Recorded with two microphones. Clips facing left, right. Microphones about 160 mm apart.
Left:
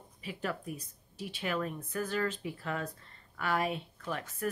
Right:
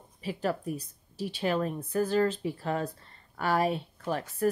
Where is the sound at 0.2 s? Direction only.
35° right (ahead or behind).